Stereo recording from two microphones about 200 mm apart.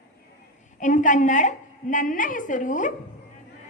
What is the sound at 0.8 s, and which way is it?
A woman's voice, 40° left (ahead or behind).